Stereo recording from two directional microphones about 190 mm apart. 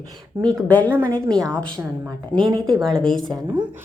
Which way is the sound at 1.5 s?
5° left (ahead or behind).